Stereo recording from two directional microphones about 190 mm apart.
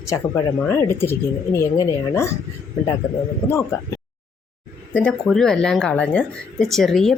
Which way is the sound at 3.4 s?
15° left (ahead or behind).